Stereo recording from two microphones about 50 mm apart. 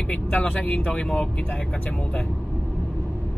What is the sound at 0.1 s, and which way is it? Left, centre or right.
Speech, left.